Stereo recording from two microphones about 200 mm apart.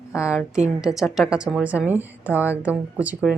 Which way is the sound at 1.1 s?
5° right (ahead or behind).